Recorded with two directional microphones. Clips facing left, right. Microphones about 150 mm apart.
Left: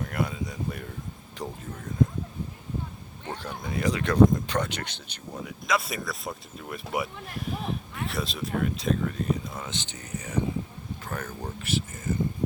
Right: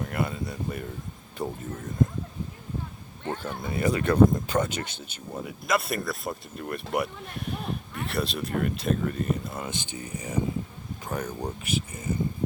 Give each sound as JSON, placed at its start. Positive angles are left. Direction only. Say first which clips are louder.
{"t": 0.0, "sound": "speech", "louder": "even", "side_deg": 0}
{"t": 3.2, "sound": "speech", "louder": "right 3 dB", "side_deg": -5}